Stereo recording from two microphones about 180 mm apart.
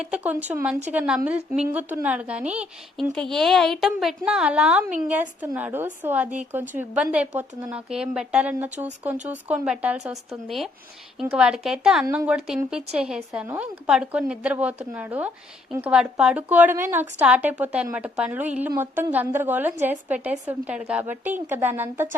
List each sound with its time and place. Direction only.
0.0 s a woman's voice: 5° right (ahead or behind)
8.8 s a woman's voice: 15° right (ahead or behind)